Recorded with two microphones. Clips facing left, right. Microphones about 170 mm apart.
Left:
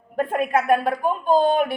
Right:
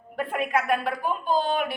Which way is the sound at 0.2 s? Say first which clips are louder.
Left 5 dB; 45° left (ahead or behind).